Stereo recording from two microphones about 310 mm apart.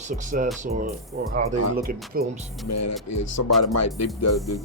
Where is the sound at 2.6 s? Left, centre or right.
Left.